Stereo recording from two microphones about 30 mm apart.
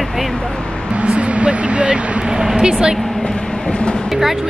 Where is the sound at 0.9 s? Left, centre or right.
Right.